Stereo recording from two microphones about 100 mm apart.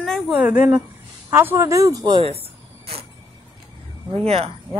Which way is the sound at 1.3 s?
25° right (ahead or behind).